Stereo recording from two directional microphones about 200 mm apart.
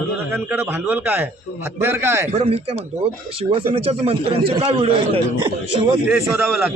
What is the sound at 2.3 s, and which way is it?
A man's voice, 30° right (ahead or behind).